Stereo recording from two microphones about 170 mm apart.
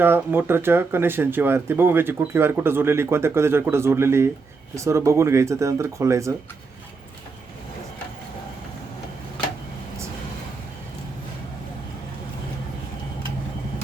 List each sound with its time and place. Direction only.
0.0 s speech: 10° right (ahead or behind)